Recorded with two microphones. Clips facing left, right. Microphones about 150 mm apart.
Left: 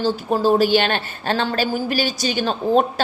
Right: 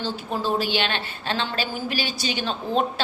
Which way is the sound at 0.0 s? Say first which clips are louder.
Left 8 dB; 45° left (ahead or behind).